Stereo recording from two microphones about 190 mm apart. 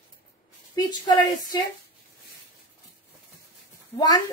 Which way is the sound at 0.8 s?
20° left (ahead or behind).